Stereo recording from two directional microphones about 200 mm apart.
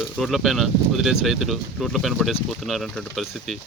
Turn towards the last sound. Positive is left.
turn(degrees=0)  # may be behind; listen again after turning